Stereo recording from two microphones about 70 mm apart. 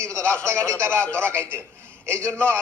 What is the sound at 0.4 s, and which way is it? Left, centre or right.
A man's voice, right.